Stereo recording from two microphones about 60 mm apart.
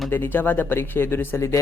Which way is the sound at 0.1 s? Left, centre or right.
Left.